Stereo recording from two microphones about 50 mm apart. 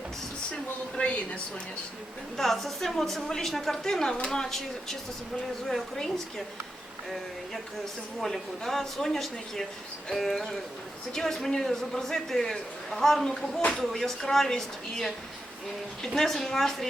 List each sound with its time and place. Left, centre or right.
0.5 s speech: left
2.3 s a woman's voice: centre
8.2 s a woman's voice: centre